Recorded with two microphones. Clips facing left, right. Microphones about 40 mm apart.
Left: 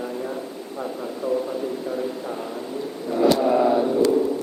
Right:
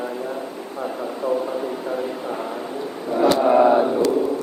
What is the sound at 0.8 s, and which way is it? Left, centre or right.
Speech, right.